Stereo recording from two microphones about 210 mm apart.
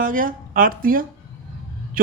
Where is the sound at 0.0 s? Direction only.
40° right (ahead or behind).